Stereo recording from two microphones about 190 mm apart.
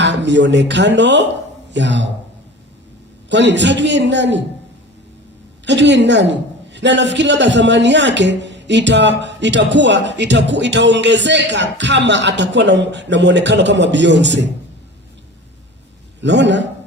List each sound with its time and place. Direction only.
0.0 s a man's voice: 65° right (ahead or behind)
3.2 s a man's voice: 65° right (ahead or behind)
5.6 s a man's voice: 65° right (ahead or behind)
16.2 s a man's voice: 70° right (ahead or behind)